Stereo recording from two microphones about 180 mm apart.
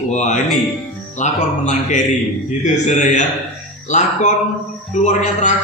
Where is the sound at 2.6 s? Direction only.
40° left (ahead or behind).